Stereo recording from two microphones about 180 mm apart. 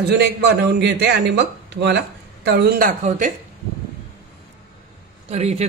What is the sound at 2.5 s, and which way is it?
Speech, 60° right (ahead or behind).